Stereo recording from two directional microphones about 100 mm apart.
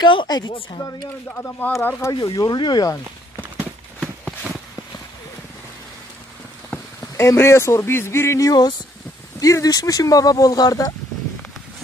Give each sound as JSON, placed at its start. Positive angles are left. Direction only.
{"t": 0.0, "sound": "speech", "side_deg": 50}
{"t": 1.3, "sound": "speech", "side_deg": 15}
{"t": 2.1, "sound": "speech", "side_deg": 45}
{"t": 6.7, "sound": "a sound", "side_deg": 25}
{"t": 7.2, "sound": "speech", "side_deg": 30}